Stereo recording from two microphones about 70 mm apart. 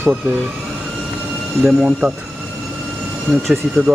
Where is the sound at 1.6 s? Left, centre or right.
Centre.